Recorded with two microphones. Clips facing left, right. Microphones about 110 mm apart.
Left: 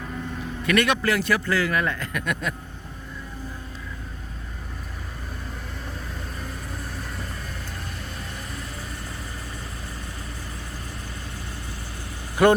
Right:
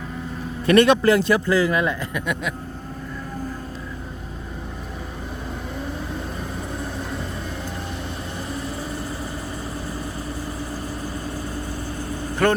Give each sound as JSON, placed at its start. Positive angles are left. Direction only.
{"t": 0.6, "sound": "a man's voice", "side_deg": -30}
{"t": 12.4, "sound": "speech", "side_deg": 15}